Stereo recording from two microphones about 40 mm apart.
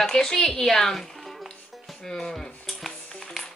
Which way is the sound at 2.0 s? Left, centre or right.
Centre.